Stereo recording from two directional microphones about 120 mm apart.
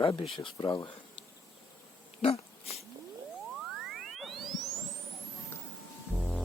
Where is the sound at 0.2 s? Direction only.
45° left (ahead or behind).